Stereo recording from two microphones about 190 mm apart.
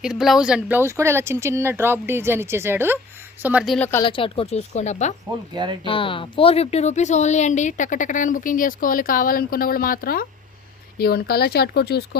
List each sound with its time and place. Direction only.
0.0 s speech: centre (ahead or behind)
3.8 s speech: 10° left (ahead or behind)
4.0 s speech: 25° left (ahead or behind)
5.8 s speech: 25° left (ahead or behind); by 12.0 s 60° left (ahead or behind)